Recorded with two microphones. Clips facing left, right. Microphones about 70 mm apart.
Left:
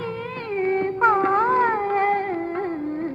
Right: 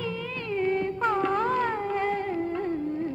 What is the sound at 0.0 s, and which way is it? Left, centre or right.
Music, left.